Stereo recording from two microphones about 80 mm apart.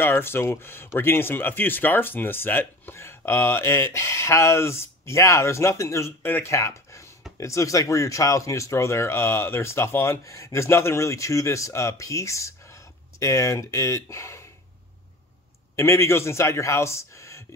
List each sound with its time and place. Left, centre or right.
0.0 s speech: left
6.5 s speech: left
15.7 s speech: left